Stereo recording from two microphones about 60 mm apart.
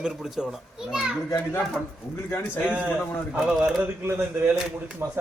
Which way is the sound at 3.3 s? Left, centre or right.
Centre.